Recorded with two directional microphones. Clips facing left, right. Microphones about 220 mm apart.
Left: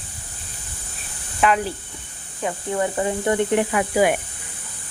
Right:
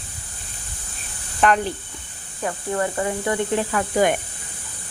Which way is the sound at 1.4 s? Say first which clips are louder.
Right 1 dB; 5° left (ahead or behind).